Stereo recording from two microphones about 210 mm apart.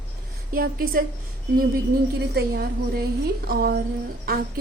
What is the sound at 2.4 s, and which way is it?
A woman's voice, 50° right (ahead or behind).